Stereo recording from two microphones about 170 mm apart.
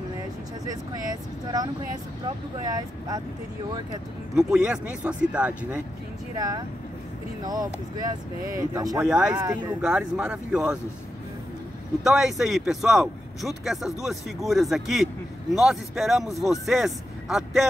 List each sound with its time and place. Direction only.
0.7 s speech: 20° right (ahead or behind)
4.4 s speech: 5° right (ahead or behind)
6.3 s speech: 25° right (ahead or behind)
9.0 s speech: 5° right (ahead or behind)
12.0 s speech: 5° right (ahead or behind)